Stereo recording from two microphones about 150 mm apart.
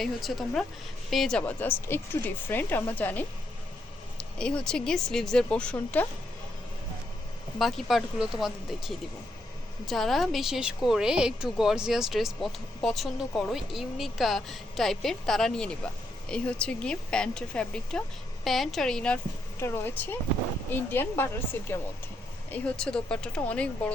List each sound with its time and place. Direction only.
0.0 s a woman's voice: centre (ahead or behind)
7.6 s a woman's voice: centre (ahead or behind)
19.5 s speech: 15° left (ahead or behind)